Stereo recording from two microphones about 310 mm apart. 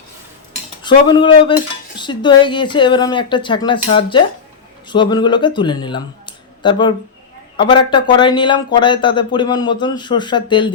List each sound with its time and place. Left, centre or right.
0.8 s speech: centre